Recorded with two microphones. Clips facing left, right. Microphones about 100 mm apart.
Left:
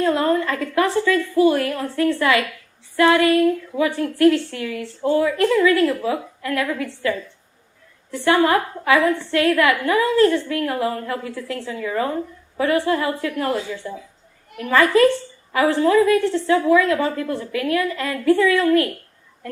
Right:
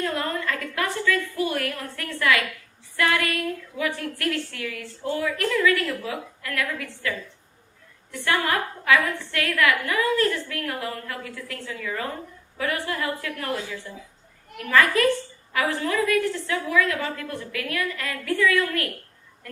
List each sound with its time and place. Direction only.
0.0 s a woman's voice: 25° left (ahead or behind)
8.1 s a woman's voice: 30° left (ahead or behind)